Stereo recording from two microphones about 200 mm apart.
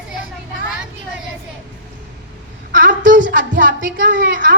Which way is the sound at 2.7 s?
45° right (ahead or behind).